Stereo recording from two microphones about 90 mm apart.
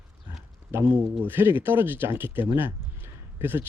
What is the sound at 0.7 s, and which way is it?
Speech, 20° right (ahead or behind).